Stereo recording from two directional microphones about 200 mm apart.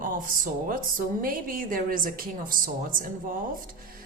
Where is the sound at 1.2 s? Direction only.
45° right (ahead or behind).